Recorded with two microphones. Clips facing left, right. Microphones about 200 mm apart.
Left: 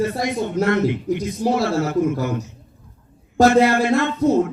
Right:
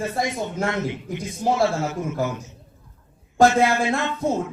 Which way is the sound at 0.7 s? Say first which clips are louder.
Left 8 dB; 55° left (ahead or behind).